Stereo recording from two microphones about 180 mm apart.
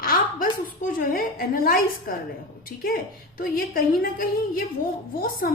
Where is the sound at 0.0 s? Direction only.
50° left (ahead or behind).